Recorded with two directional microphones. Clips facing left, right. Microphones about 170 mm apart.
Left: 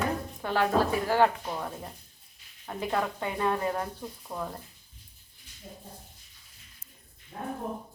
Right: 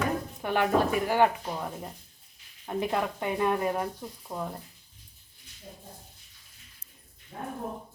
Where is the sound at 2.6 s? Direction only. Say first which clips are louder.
Right 1 dB; 15° right (ahead or behind).